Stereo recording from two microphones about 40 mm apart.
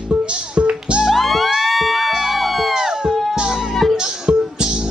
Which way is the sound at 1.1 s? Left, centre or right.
Centre.